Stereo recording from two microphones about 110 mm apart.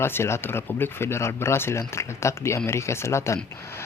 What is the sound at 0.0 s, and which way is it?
Speech, 25° left (ahead or behind).